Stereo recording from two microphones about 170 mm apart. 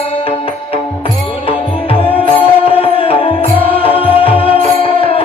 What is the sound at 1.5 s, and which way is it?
Music, 35° left (ahead or behind).